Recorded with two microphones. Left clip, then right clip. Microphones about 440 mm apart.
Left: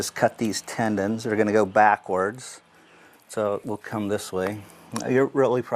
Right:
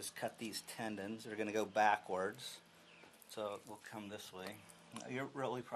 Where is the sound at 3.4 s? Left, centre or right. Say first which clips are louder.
Left 19 dB; left.